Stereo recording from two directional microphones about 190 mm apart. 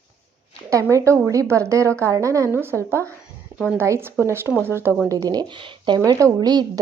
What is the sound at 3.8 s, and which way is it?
A woman's voice, 10° right (ahead or behind).